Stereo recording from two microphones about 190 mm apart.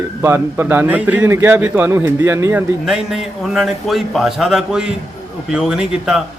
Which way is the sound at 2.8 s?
Centre (ahead or behind).